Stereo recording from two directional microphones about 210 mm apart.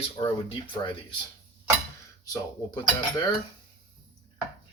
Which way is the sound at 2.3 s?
20° left (ahead or behind).